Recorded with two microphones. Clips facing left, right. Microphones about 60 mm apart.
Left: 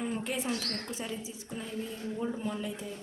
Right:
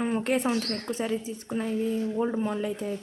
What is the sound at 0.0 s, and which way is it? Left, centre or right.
A woman's voice, right.